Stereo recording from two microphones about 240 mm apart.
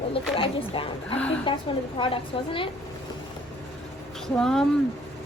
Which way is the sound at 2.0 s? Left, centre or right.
Left.